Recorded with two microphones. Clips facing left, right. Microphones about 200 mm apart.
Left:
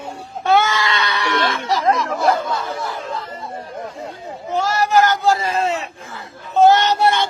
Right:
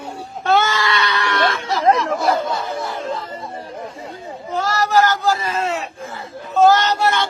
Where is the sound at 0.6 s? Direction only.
20° left (ahead or behind).